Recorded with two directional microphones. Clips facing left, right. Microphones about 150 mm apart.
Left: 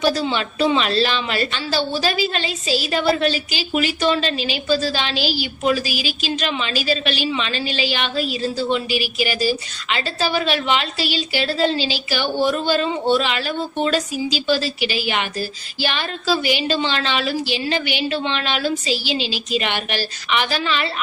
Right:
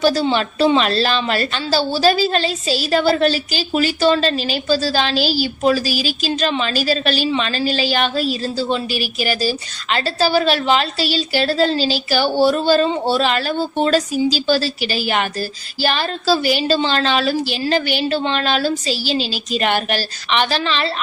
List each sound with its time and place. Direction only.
0.1 s a woman's voice: 35° right (ahead or behind)